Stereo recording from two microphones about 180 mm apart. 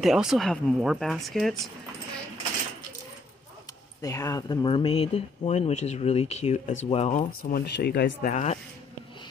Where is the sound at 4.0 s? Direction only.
20° left (ahead or behind); by 7.2 s 35° left (ahead or behind).